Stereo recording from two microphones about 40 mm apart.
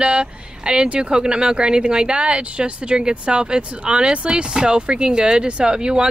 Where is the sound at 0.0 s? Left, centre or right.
Right.